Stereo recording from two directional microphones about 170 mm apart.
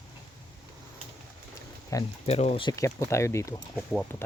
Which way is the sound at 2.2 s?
35° left (ahead or behind).